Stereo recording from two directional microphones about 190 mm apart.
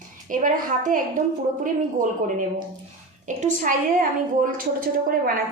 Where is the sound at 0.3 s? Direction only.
45° right (ahead or behind).